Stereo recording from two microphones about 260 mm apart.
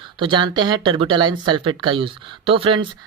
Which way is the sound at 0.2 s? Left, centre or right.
Centre.